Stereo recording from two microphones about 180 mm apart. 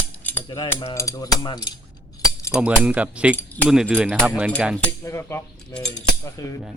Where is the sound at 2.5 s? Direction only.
5° right (ahead or behind).